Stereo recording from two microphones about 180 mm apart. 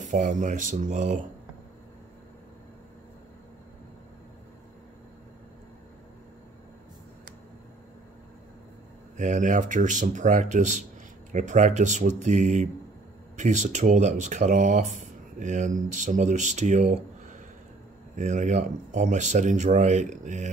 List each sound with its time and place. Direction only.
0.0 s speech: 45° right (ahead or behind)
9.1 s speech: 45° right (ahead or behind)